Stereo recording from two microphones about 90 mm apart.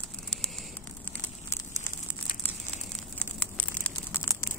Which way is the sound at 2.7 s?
15° left (ahead or behind).